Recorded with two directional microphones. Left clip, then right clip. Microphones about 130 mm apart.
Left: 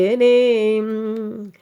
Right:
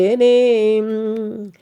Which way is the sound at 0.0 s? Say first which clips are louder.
Right 1 dB; 20° right (ahead or behind).